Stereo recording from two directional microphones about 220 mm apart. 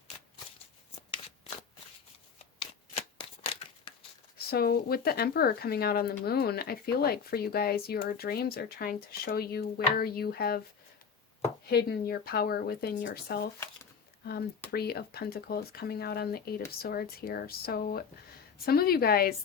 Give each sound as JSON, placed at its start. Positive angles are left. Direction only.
{"t": 2.6, "sound": "shuffling cards", "side_deg": 25}
{"t": 4.4, "sound": "speech", "side_deg": 45}
{"t": 11.7, "sound": "speech", "side_deg": 45}
{"t": 14.7, "sound": "speech", "side_deg": 45}